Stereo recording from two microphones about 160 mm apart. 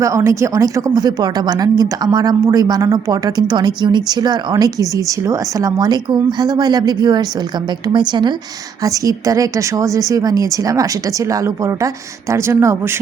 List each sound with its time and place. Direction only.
0.0 s speech: 20° right (ahead or behind)